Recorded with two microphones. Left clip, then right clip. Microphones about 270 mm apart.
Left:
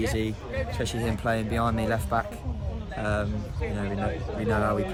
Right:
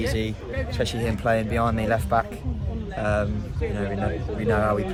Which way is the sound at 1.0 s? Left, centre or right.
Centre.